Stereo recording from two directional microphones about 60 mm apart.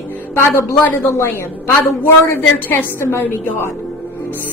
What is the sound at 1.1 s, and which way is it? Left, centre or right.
A woman's voice, left.